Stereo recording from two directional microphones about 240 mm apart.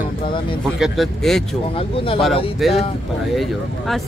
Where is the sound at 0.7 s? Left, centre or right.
Centre.